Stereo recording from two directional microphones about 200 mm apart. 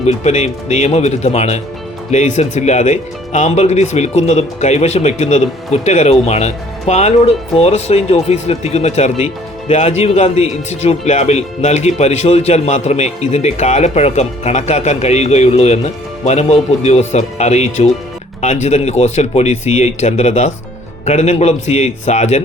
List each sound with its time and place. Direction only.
0.0 s speech: 35° left (ahead or behind)